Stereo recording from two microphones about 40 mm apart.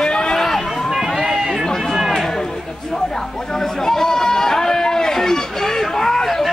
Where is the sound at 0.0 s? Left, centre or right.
Centre.